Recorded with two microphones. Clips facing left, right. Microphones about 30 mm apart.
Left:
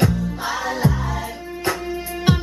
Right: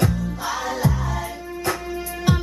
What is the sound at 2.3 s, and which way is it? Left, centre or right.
Music, left.